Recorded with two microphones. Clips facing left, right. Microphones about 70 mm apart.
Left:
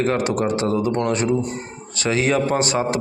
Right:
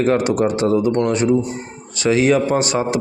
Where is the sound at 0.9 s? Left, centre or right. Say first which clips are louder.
Right 4 dB; centre.